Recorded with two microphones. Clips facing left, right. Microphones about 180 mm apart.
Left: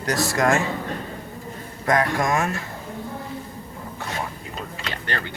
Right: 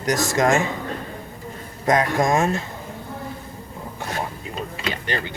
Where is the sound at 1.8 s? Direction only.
20° right (ahead or behind).